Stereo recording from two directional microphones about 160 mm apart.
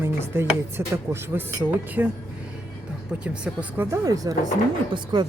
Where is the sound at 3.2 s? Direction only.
10° right (ahead or behind).